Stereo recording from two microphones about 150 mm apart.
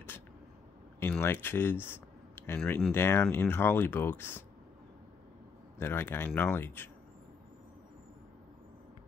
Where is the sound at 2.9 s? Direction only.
15° left (ahead or behind).